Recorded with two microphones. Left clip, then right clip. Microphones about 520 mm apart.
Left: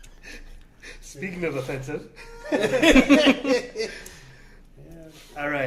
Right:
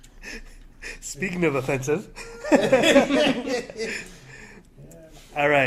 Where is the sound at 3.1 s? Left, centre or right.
Left.